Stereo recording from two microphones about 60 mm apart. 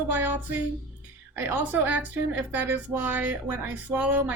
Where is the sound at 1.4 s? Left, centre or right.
Right.